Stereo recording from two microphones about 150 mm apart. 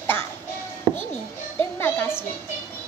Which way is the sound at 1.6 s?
15° left (ahead or behind).